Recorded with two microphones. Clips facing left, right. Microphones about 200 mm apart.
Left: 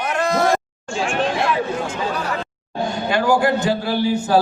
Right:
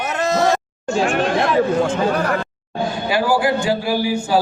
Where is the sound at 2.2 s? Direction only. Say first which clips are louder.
Right 5 dB; 55° right (ahead or behind).